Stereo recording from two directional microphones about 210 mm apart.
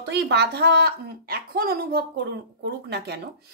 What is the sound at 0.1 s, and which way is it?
A woman's voice, 50° right (ahead or behind).